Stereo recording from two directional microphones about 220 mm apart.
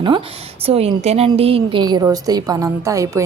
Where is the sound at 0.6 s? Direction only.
25° right (ahead or behind).